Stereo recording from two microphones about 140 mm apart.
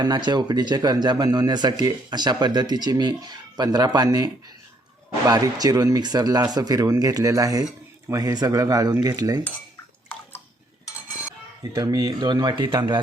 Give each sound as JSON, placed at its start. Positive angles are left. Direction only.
{"t": 0.0, "sound": "speech", "side_deg": -30}
{"t": 11.7, "sound": "speech", "side_deg": -25}